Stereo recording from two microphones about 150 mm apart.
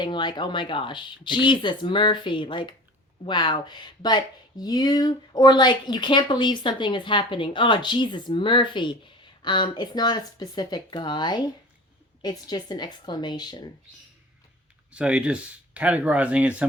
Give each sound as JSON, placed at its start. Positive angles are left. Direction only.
{"t": 0.0, "sound": "speech", "side_deg": 30}
{"t": 14.9, "sound": "speech", "side_deg": -10}